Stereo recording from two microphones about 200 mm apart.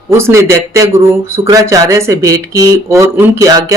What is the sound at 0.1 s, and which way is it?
Speech, 15° right (ahead or behind).